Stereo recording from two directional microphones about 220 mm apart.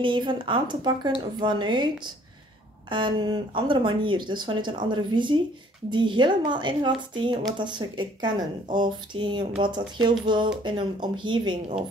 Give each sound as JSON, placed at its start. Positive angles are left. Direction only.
{"t": 0.0, "sound": "speech", "side_deg": -20}
{"t": 2.9, "sound": "speech", "side_deg": -20}